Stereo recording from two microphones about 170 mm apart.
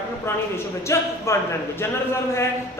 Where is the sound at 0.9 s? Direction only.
15° left (ahead or behind).